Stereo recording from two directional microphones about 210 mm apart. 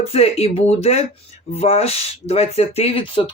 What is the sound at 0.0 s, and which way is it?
Speech, 30° left (ahead or behind).